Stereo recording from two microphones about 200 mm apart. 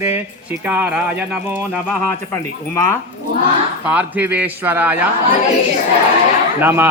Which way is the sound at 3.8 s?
10° right (ahead or behind).